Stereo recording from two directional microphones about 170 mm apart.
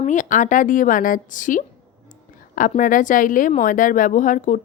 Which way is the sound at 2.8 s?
50° left (ahead or behind).